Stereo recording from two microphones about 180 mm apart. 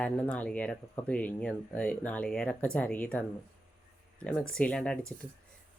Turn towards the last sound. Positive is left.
turn(degrees=5)  # may be behind; listen again after turning